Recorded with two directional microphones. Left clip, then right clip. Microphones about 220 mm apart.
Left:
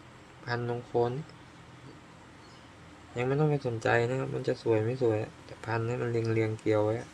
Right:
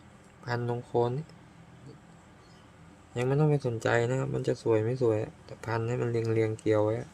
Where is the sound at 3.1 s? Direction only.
20° right (ahead or behind).